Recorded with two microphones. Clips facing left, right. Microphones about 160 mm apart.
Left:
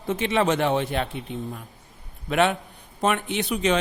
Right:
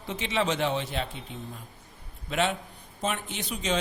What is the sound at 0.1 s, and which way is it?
A man's voice, 55° left (ahead or behind).